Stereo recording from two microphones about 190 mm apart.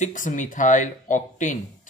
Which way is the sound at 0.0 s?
40° left (ahead or behind).